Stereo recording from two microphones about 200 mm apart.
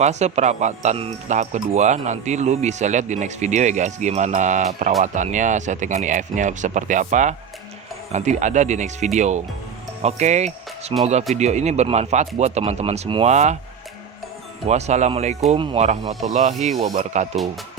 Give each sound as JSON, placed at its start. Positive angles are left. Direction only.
{"t": 0.0, "sound": "speech", "side_deg": -35}
{"t": 14.7, "sound": "speech", "side_deg": -35}